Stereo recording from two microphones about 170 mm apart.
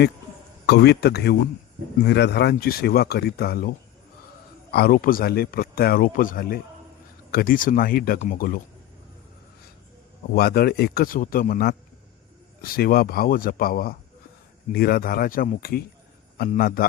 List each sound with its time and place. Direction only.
0.7 s speech: 70° left (ahead or behind)
2.0 s a man's voice: 80° left; by 8.6 s 60° left (ahead or behind)
10.3 s a man's voice: 65° left (ahead or behind)